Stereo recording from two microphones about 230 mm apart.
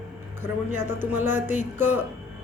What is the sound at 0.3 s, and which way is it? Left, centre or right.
Music, centre.